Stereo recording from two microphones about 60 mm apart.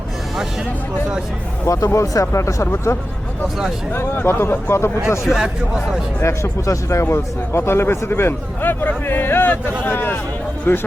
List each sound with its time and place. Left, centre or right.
1.6 s speech: left
3.9 s speech: left
5.2 s speech: centre
6.2 s a man's voice: left